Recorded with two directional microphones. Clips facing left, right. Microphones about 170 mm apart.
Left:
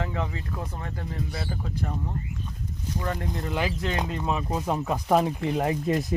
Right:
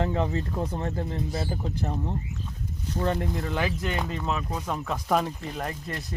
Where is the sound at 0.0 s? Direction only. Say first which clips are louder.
Right 5 dB; 25° right (ahead or behind).